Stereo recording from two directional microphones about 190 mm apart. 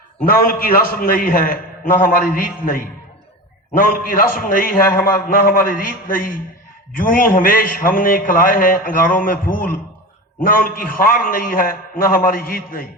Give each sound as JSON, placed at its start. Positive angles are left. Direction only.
{"t": 0.2, "sound": "a man's voice", "side_deg": 50}